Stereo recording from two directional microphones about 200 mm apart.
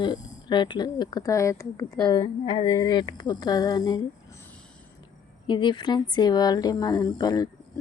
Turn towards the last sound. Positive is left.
turn(degrees=20)  # may be behind; listen again after turning